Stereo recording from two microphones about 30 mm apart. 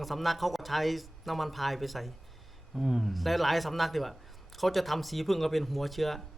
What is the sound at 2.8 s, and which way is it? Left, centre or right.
Speech, centre.